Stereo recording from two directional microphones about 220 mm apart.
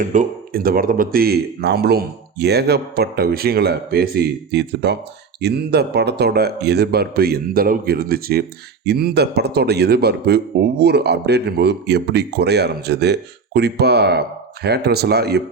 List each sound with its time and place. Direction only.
0.0 s speech: 35° right (ahead or behind)